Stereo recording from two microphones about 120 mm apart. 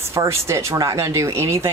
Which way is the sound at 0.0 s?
25° right (ahead or behind).